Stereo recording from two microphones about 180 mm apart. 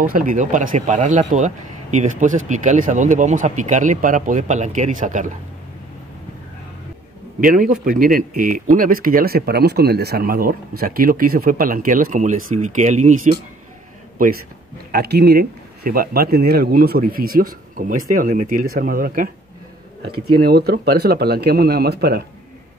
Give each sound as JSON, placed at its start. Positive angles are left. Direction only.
{"t": 0.0, "sound": "speech", "side_deg": -50}
{"t": 7.3, "sound": "speech", "side_deg": -50}
{"t": 14.2, "sound": "speech", "side_deg": -50}
{"t": 14.9, "sound": "a man's voice", "side_deg": -60}